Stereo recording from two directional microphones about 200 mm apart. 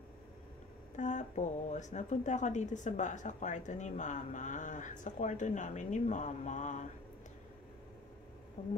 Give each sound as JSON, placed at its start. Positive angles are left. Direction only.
{"t": 0.9, "sound": "speech", "side_deg": 40}
{"t": 8.6, "sound": "speech", "side_deg": 40}